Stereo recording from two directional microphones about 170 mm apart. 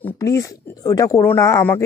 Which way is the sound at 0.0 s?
20° left (ahead or behind).